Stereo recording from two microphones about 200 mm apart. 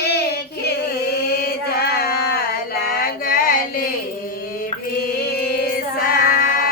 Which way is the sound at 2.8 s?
50° left (ahead or behind).